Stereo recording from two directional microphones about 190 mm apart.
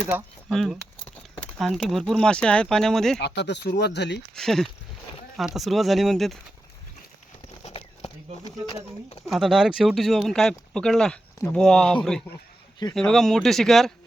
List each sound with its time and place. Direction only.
0.1 s speech: 10° right (ahead or behind)
0.5 s speech: centre (ahead or behind)
3.2 s speech: 65° left (ahead or behind)
4.4 s speech: centre (ahead or behind)
7.6 s a sound: 30° left (ahead or behind)
9.3 s speech: centre (ahead or behind)